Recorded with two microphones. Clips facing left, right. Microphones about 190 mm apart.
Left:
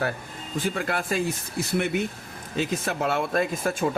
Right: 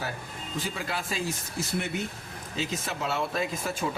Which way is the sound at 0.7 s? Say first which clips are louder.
Left 9 dB; 55° left (ahead or behind).